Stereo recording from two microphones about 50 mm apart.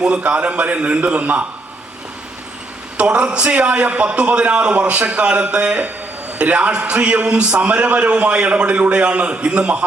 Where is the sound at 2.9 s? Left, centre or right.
Right.